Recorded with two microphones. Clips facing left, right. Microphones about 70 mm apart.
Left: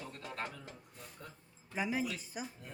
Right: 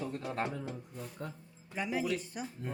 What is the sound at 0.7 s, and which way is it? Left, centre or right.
Speech, centre.